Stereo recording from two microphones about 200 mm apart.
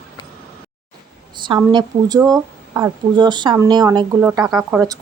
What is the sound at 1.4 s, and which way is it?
A woman's voice, 25° right (ahead or behind).